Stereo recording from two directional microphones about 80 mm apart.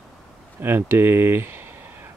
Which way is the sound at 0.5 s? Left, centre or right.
Right.